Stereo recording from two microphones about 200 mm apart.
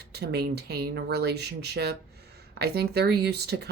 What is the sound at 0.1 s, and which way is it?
Speech, 55° right (ahead or behind).